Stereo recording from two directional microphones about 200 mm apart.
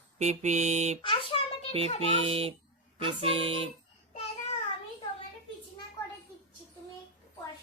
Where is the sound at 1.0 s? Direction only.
25° left (ahead or behind).